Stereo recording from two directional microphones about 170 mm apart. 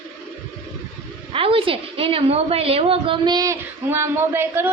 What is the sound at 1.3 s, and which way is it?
A woman's voice, 35° right (ahead or behind).